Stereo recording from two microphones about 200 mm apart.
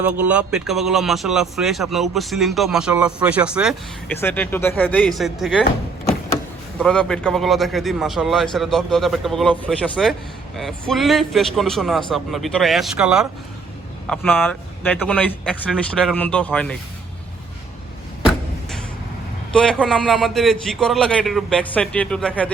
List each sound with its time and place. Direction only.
0.0 s speech: 5° right (ahead or behind)
4.2 s speech: 10° left (ahead or behind)
6.7 s speech: 5° left (ahead or behind)
19.5 s speech: 5° left (ahead or behind)